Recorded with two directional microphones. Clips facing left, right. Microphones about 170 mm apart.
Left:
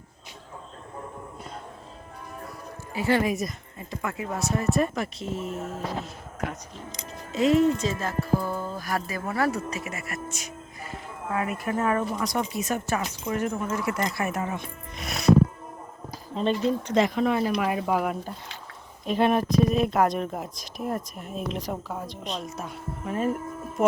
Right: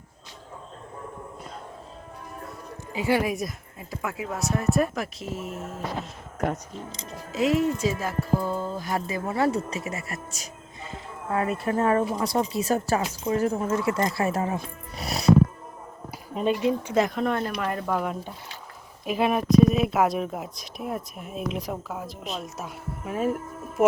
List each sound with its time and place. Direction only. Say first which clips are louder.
2.9 s speech: even; 10° right (ahead or behind)
7.3 s speech: left 3 dB; 5° right (ahead or behind); by 15.3 s 35° right (ahead or behind)
16.3 s speech: right 1 dB; 10° right (ahead or behind)